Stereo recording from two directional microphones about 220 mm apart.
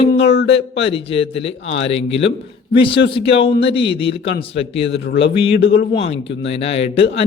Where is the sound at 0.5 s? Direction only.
25° left (ahead or behind).